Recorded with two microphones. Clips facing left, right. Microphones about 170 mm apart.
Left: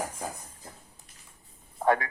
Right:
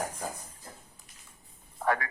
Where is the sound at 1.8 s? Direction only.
25° left (ahead or behind).